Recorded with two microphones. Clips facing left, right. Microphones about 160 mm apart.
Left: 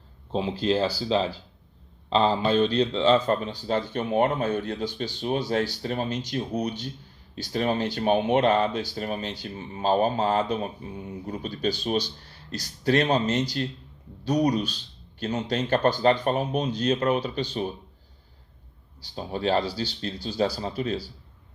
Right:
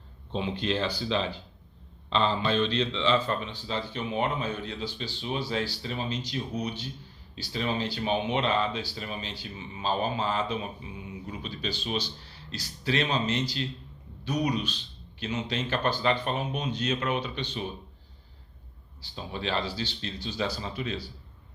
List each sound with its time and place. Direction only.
0.3 s speech: 35° left (ahead or behind)
19.1 s speech: 45° left (ahead or behind)